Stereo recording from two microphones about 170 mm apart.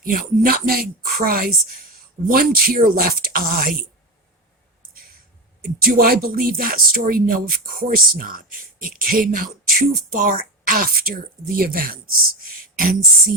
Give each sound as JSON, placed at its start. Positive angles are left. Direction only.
{"t": 0.0, "sound": "speech", "side_deg": -55}
{"t": 5.8, "sound": "speech", "side_deg": -60}
{"t": 12.4, "sound": "a sound", "side_deg": -55}